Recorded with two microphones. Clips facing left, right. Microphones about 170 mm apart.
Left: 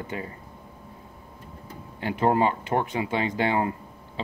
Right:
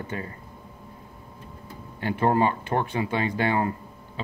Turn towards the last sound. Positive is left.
turn(degrees=20)  # may be behind; listen again after turning